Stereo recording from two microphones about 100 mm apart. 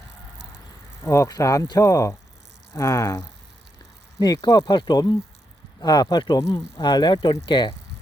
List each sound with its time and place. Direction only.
1.0 s speech: 25° left (ahead or behind); by 7.7 s 50° left (ahead or behind)